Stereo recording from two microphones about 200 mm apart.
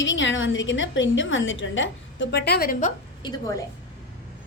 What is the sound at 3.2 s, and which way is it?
Speech, 20° left (ahead or behind).